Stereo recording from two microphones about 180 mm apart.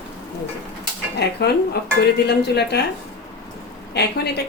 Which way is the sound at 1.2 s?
65° left (ahead or behind).